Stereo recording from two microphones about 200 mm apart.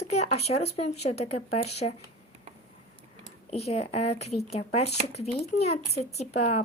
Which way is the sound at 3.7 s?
30° left (ahead or behind).